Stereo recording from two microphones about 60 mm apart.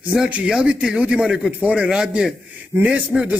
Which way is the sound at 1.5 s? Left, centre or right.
Right.